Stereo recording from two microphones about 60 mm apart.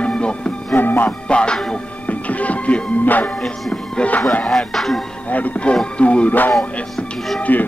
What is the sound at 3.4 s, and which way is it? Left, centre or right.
Music, centre.